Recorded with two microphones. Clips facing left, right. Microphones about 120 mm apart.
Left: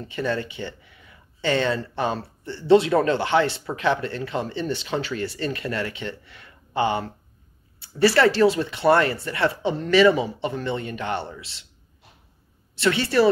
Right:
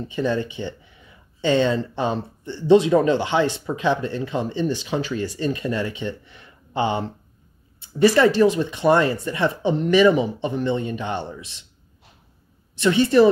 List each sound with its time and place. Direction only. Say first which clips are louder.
0.0 s speech: right 3 dB; 15° right (ahead or behind)
12.7 s speech: right 4 dB; 20° right (ahead or behind)